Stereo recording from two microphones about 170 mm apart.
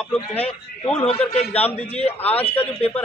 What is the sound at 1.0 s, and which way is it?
A man's voice, 40° left (ahead or behind).